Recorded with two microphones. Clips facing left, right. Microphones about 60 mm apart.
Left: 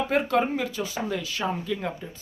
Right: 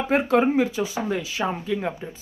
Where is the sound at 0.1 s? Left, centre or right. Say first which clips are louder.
Right 7 dB; right.